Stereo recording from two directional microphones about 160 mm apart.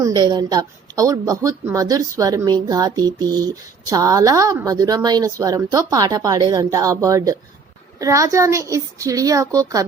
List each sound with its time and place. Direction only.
0.0 s speech: 25° right (ahead or behind)